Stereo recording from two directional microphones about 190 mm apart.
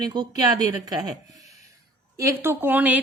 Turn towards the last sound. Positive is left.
turn(degrees=-10)  # may be behind; listen again after turning